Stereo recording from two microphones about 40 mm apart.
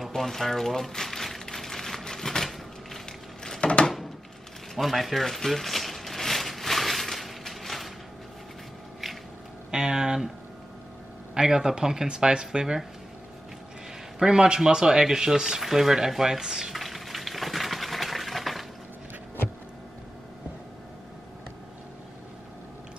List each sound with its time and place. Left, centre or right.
0.1 s crumpling: centre
3.8 s a sound: centre
9.7 s speech: centre
11.3 s speech: centre
14.2 s speech: centre
16.7 s a sound: centre